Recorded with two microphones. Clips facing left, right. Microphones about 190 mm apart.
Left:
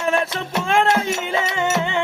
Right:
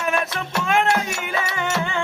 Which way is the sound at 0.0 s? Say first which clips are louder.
Left 3 dB; 30° left (ahead or behind).